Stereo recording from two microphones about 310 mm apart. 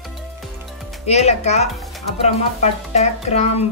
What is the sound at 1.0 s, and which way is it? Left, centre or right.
Speech, left.